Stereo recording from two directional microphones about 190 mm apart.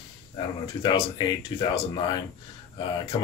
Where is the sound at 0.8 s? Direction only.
25° left (ahead or behind).